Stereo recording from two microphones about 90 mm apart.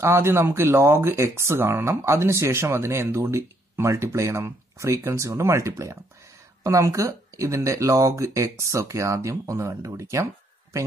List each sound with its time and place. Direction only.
0.0 s speech: 25° right (ahead or behind)